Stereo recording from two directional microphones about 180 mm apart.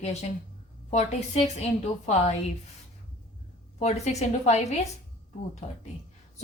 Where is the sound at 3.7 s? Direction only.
40° left (ahead or behind).